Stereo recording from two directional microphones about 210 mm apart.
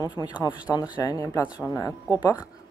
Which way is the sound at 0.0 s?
20° left (ahead or behind).